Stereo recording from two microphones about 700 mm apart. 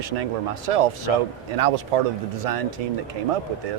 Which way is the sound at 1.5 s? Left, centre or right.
Right.